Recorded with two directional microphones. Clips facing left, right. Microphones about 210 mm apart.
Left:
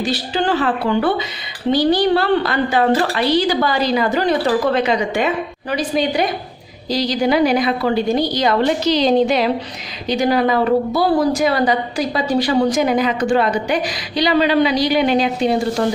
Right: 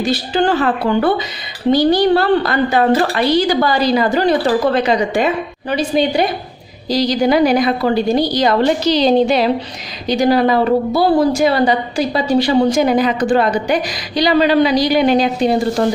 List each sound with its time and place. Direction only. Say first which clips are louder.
0.3 s a woman's voice: right 3 dB; 45° right (ahead or behind); by 6.2 s 25° right (ahead or behind)
6.9 s a woman's voice: right 3 dB; 40° right (ahead or behind)